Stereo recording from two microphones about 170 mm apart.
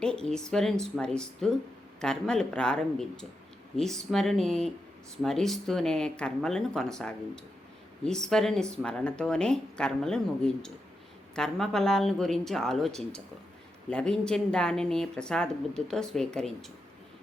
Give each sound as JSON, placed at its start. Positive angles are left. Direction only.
{"t": 0.0, "sound": "speech", "side_deg": 5}